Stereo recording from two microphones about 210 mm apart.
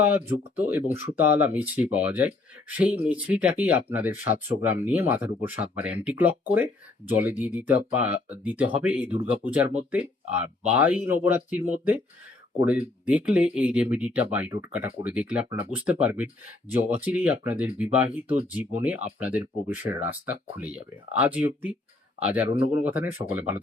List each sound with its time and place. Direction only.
0.0 s speech: 10° right (ahead or behind)